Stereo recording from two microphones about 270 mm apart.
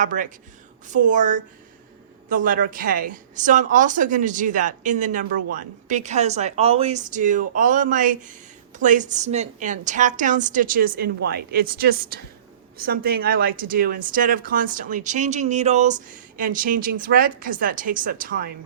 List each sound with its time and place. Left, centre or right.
0.0 s speech: right